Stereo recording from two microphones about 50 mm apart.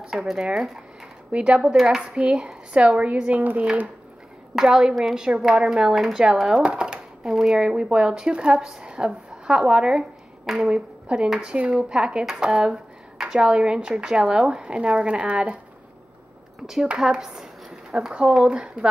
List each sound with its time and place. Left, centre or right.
0.1 s speech: centre
0.4 s speech: centre
1.8 s speech: centre
2.1 s speech: centre
4.6 s speech: centre
10.7 s speech: centre
17.0 s speech: centre